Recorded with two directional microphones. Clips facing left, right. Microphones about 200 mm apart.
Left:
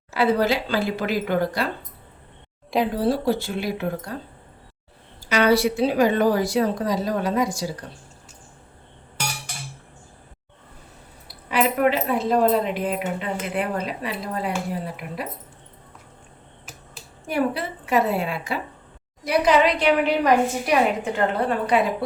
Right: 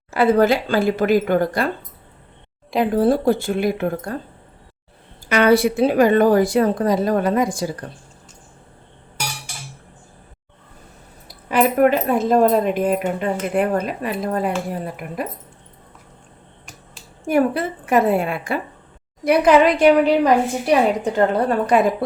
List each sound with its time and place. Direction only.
0.1 s speech: 50° right (ahead or behind)
2.9 s speech: 50° right (ahead or behind)
5.2 s speech: 55° right (ahead or behind)
11.3 s speech: 45° right (ahead or behind)
17.2 s speech: 50° right (ahead or behind)